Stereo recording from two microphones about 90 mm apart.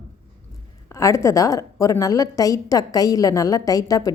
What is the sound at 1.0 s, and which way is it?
A woman's voice, 35° left (ahead or behind).